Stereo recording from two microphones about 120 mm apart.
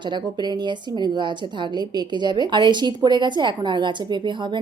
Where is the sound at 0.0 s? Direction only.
40° right (ahead or behind).